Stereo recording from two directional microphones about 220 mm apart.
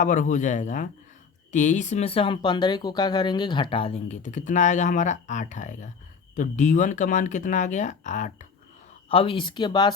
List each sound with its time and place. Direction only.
0.0 s speech: 35° left (ahead or behind); by 9.9 s 20° left (ahead or behind)